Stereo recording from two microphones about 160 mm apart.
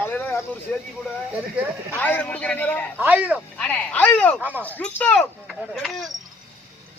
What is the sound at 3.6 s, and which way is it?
Speech, 10° left (ahead or behind).